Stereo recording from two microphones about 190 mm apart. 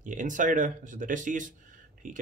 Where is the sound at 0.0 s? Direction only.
40° right (ahead or behind).